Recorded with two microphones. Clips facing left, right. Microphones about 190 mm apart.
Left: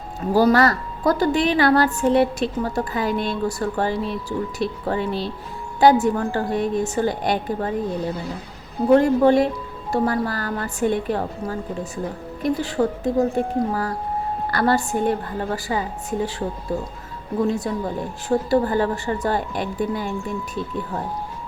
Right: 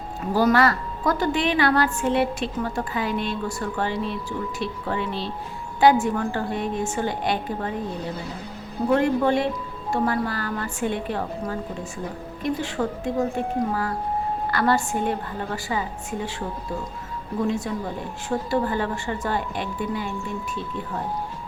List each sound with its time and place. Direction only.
0.3 s a woman's voice: 40° left (ahead or behind)
8.9 s a woman's voice: 40° left (ahead or behind)
12.4 s a woman's voice: 35° left (ahead or behind)
18.3 s a woman's voice: 35° left (ahead or behind)